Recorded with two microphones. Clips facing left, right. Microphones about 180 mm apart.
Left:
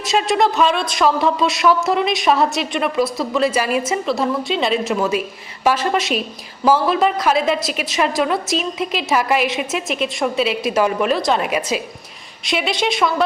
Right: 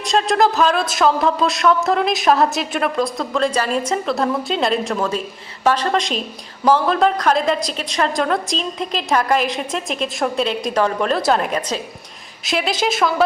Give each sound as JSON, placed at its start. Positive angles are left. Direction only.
{"t": 0.0, "sound": "a woman's voice", "side_deg": 5}